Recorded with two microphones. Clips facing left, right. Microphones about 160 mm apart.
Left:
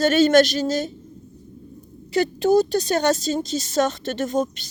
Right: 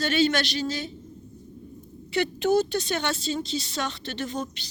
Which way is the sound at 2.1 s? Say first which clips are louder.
Left 5 dB; 40° left (ahead or behind).